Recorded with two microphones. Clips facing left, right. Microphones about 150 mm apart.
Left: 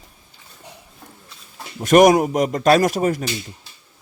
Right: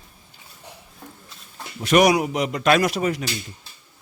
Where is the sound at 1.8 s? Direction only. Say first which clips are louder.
Left 5 dB; 45° left (ahead or behind).